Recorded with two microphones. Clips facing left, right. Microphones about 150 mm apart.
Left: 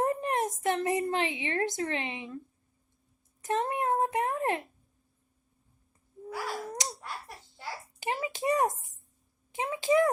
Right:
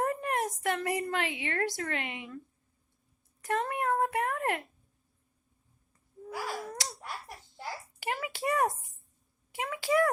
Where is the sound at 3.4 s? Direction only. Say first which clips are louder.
Left 2 dB; 20° left (ahead or behind).